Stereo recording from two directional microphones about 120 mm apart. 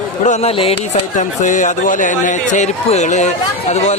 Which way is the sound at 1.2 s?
90° left.